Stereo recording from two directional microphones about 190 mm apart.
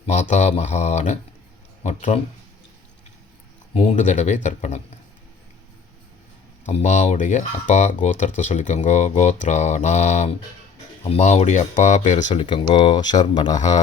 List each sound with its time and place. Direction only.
0.0 s speech: 35° left (ahead or behind)
3.8 s speech: 35° left (ahead or behind)
6.7 s speech: 40° left (ahead or behind)
12.3 s speech: 25° left (ahead or behind)